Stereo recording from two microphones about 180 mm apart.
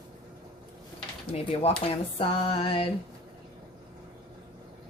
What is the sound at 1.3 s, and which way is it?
Music, 35° left (ahead or behind).